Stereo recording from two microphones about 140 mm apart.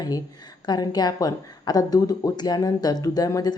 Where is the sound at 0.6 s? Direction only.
30° left (ahead or behind).